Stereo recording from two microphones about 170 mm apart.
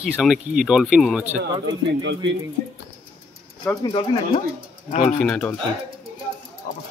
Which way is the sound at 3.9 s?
30° left (ahead or behind).